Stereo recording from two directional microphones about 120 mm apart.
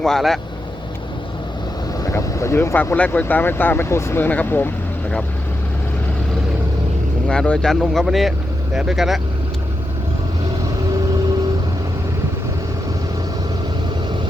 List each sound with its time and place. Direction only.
0.0 s speech: 5° left (ahead or behind)
2.0 s speech: 25° left (ahead or behind)
7.3 s speech: 5° left (ahead or behind)